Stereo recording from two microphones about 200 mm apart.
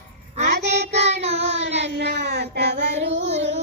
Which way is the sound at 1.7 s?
60° right (ahead or behind).